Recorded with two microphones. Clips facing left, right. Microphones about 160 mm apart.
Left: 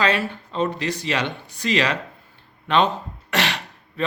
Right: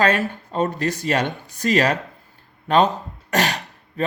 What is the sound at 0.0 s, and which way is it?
Speech, 45° right (ahead or behind).